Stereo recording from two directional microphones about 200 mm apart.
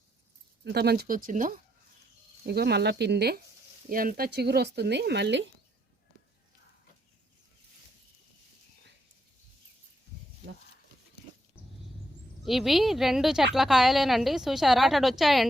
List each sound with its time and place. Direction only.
0.6 s speech: 55° right (ahead or behind)
2.5 s speech: 55° right (ahead or behind)
12.5 s a woman's voice: centre (ahead or behind)